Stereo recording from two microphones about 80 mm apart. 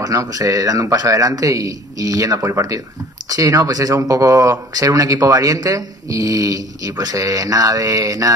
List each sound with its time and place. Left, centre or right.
0.0 s speech: right